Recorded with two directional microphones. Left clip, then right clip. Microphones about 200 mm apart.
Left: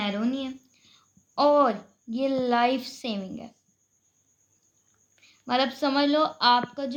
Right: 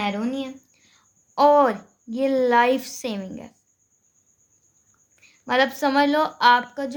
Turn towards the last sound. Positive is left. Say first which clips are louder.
# right 5 dB
turn(degrees=-55)  # may be behind; listen again after turning